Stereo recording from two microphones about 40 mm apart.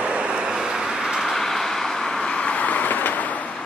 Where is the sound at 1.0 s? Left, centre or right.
Centre; by 2.6 s left.